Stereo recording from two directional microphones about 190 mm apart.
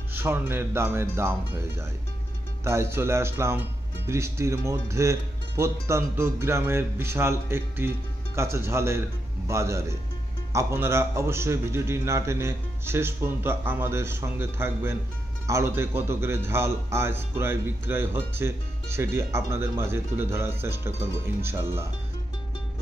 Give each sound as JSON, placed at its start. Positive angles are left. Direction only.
{"t": 0.1, "sound": "speech", "side_deg": -10}
{"t": 2.6, "sound": "speech", "side_deg": -15}